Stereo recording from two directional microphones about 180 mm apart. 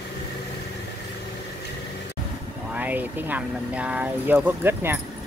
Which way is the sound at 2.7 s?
10° right (ahead or behind).